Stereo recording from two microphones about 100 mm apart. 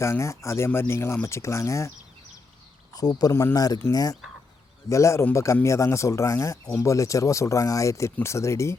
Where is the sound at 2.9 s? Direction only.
40° left (ahead or behind).